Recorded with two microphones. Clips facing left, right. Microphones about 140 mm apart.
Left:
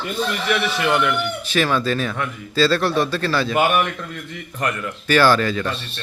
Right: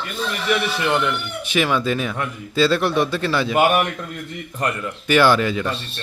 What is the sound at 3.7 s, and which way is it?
Speech, 35° right (ahead or behind).